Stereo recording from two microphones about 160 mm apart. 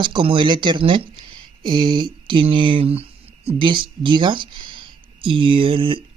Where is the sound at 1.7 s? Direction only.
30° right (ahead or behind).